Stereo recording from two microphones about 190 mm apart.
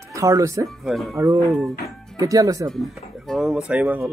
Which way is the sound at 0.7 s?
Centre (ahead or behind).